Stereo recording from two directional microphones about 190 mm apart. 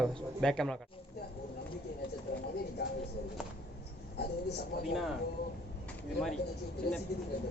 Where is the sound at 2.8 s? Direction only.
55° left (ahead or behind).